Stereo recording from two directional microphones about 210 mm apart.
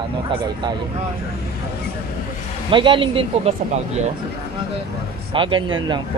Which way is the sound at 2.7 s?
25° right (ahead or behind).